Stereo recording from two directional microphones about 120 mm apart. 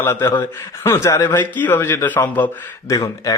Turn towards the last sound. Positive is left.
turn(degrees=30)  # may be behind; listen again after turning